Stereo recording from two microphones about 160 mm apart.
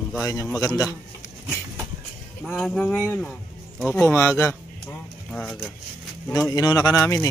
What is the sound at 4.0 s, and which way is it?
Speech, 15° left (ahead or behind).